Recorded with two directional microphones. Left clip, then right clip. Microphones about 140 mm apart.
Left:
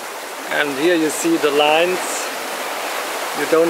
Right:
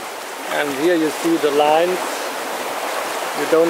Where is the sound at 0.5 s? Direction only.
20° left (ahead or behind).